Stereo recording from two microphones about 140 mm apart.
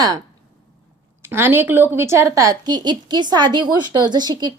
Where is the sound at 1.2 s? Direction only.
15° right (ahead or behind).